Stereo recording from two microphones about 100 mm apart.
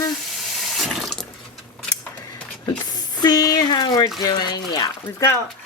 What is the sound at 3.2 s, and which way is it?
Speech, 40° left (ahead or behind).